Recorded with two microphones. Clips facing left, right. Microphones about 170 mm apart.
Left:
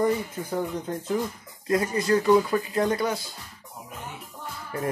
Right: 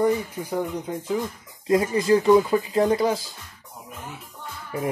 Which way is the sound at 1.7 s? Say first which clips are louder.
Right 4 dB; 25° right (ahead or behind).